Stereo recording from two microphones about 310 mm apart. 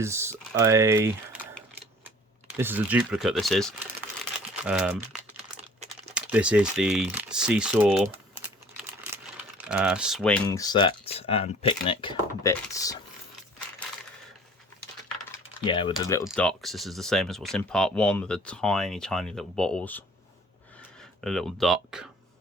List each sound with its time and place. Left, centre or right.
0.0 s speech: centre
2.6 s speech: centre
6.1 s speech: centre
9.6 s speech: centre
15.6 s speech: centre
21.2 s speech: centre